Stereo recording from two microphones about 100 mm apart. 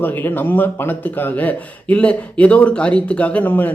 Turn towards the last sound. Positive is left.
turn(degrees=20)  # may be behind; listen again after turning